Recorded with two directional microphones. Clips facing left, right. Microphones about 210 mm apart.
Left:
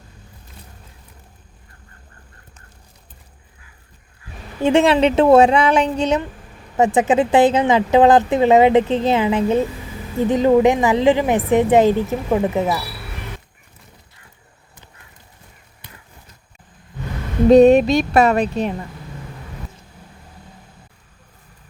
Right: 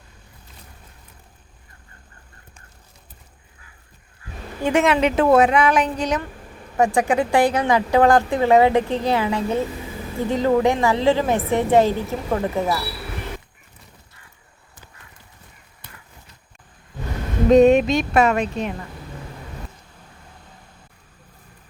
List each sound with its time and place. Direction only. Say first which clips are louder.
4.6 s a woman's voice: left 4 dB; 30° left (ahead or behind)
17.5 s music: left 3 dB; 35° left (ahead or behind)